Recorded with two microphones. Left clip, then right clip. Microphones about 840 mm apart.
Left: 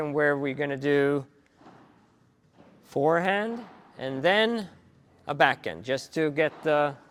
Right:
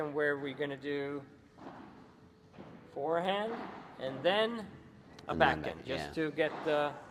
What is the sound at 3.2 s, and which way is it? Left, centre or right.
Speech, left.